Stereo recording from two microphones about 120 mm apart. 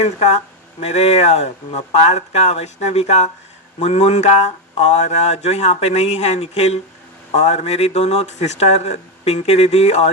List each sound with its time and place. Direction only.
0.0 s speech: 70° left (ahead or behind)